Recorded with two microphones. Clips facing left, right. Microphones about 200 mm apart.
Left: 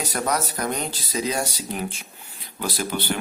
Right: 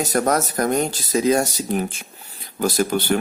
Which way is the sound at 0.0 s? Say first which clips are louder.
Right 6 dB; 45° right (ahead or behind).